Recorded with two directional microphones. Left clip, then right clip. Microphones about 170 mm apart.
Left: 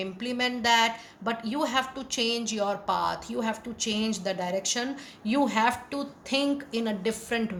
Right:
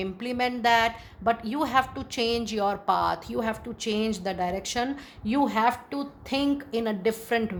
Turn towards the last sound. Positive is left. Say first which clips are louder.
# right 3 dB
turn(degrees=-45)  # may be behind; listen again after turning